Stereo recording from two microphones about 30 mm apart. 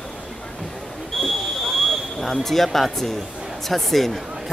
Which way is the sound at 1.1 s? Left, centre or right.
Centre.